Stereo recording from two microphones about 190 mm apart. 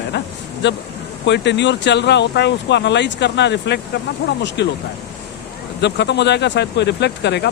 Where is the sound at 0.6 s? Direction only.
65° left (ahead or behind).